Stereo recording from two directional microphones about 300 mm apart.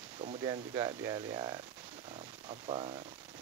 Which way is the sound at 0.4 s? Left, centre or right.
Centre.